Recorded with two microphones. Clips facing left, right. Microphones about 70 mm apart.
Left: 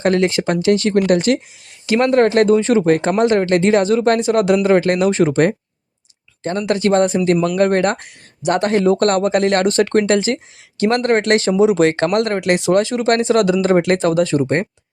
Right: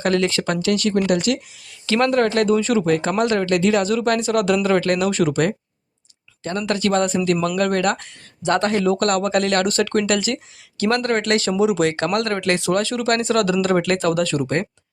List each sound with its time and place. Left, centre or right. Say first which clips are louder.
0.0 s speech: left 4 dB; left
0.9 s speech: left 5 dB; left
1.9 s speech: left 4 dB; left
12.1 s speech: left 4 dB; left